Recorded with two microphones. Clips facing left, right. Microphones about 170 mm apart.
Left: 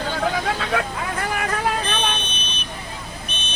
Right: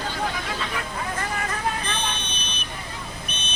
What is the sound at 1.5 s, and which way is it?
Vehicle, 75° left (ahead or behind).